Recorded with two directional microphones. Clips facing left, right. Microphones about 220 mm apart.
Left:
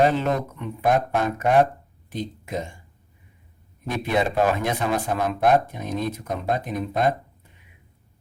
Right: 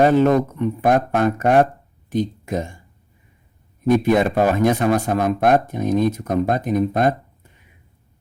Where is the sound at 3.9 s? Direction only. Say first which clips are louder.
Right 8 dB; 45° right (ahead or behind).